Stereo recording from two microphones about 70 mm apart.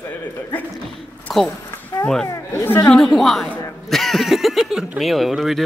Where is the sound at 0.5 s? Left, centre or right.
Left.